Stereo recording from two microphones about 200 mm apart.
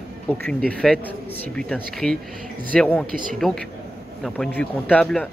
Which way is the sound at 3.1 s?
45° right (ahead or behind).